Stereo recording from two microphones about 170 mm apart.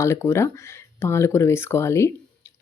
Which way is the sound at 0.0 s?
15° left (ahead or behind).